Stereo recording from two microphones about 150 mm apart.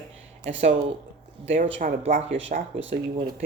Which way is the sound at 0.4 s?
50° right (ahead or behind).